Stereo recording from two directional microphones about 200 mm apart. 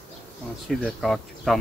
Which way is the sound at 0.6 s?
Centre (ahead or behind).